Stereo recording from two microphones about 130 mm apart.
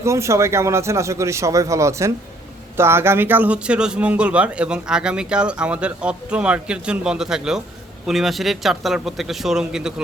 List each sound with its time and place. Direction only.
0.0 s a man's voice: 20° right (ahead or behind); by 9.9 s 5° right (ahead or behind)